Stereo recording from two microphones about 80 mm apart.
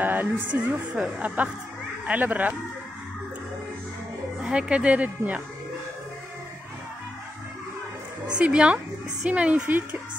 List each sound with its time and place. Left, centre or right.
0.0 s speech: right
4.4 s speech: centre
8.4 s speech: centre